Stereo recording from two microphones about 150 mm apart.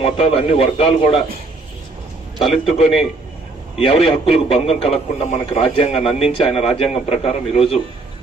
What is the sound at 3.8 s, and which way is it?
A man's voice, 40° left (ahead or behind).